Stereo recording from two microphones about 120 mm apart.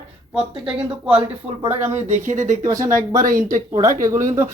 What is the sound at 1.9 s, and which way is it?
Speech, 90° right.